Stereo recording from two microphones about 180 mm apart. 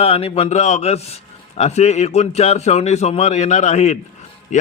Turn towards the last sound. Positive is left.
turn(degrees=40)  # may be behind; listen again after turning